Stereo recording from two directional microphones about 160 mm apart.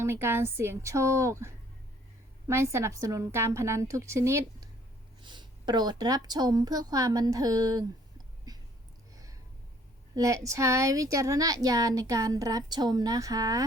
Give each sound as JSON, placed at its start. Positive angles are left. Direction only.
{"t": 0.0, "sound": "a woman's voice", "side_deg": -15}
{"t": 5.2, "sound": "a woman's voice", "side_deg": -30}
{"t": 8.5, "sound": "a sound", "side_deg": -25}
{"t": 10.2, "sound": "a woman's voice", "side_deg": -20}